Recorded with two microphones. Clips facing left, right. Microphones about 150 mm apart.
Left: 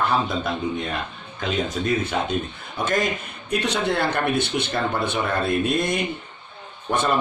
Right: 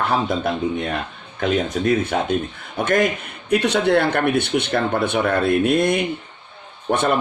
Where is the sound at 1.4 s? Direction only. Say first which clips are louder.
Right 5 dB; 55° right (ahead or behind).